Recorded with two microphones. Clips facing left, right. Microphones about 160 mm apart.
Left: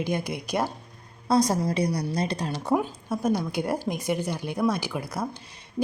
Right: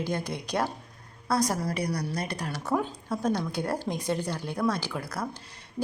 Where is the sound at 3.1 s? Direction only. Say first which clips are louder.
Left 3 dB; 10° left (ahead or behind).